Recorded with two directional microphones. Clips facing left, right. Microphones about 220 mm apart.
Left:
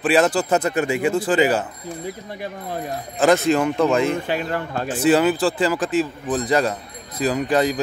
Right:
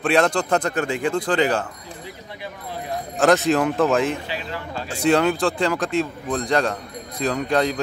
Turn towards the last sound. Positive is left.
turn(degrees=5)  # may be behind; listen again after turning